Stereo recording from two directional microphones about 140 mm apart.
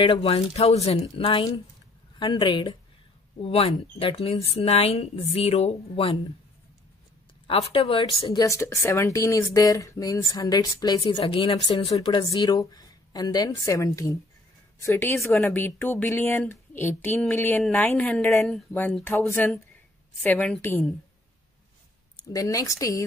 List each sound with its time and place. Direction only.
0.0 s speech: 40° left (ahead or behind)
7.4 s speech: 40° left (ahead or behind)
8.3 s speech: 25° left (ahead or behind)
22.1 s a woman's voice: 25° left (ahead or behind)